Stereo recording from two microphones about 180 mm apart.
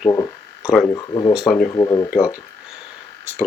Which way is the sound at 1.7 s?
20° left (ahead or behind).